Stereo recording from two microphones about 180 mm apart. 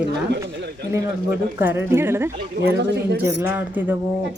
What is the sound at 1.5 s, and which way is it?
Speech, 10° right (ahead or behind).